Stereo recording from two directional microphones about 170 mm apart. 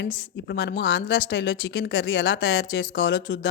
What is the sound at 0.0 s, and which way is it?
Speech, 90° left.